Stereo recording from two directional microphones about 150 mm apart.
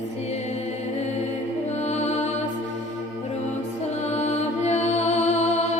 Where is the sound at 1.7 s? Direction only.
50° left (ahead or behind).